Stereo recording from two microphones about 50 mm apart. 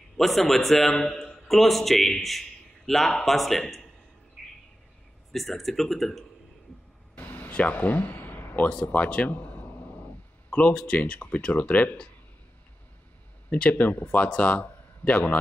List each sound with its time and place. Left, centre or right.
0.2 s a man's voice: centre
4.4 s bird: centre
5.3 s a man's voice: centre
7.2 s a sound: left
7.5 s a sound: left
8.8 s speech: left
10.5 s speech: left
13.6 s a man's voice: left